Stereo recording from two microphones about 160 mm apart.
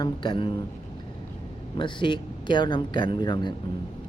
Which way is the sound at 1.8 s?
30° left (ahead or behind).